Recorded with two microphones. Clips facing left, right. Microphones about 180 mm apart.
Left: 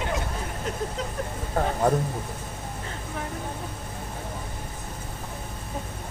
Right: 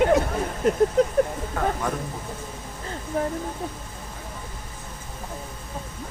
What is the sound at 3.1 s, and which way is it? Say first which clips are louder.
Speech: right 10 dB; 35° right (ahead or behind).